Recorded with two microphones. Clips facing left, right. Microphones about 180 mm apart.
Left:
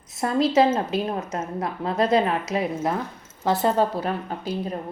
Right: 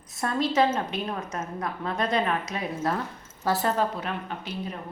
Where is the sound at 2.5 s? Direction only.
90° left.